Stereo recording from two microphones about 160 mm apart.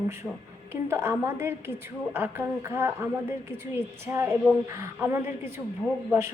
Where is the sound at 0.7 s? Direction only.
15° right (ahead or behind).